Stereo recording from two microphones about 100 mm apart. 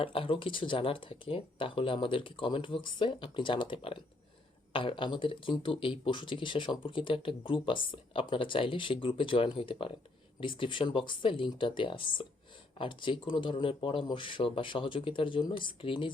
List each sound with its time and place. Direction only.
0.0 s speech: 65° left (ahead or behind)